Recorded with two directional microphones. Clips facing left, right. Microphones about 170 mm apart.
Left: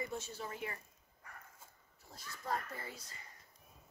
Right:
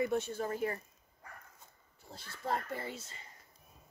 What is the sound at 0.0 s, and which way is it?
Speech, 60° right (ahead or behind).